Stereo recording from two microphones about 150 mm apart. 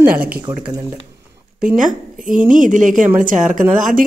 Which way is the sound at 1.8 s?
60° right (ahead or behind).